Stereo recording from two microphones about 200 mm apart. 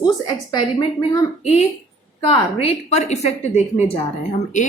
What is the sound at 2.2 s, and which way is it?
A woman's voice, 30° left (ahead or behind).